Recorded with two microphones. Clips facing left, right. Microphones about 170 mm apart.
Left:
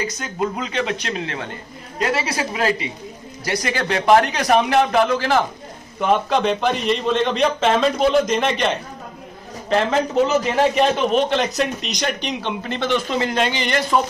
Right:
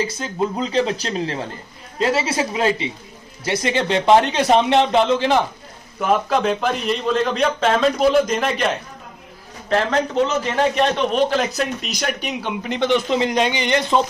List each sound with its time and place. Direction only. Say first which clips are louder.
0.0 s speech: right 2 dB; 30° right (ahead or behind)
5.9 s a man's voice: even; 5° right (ahead or behind); by 14.0 s 20° right (ahead or behind)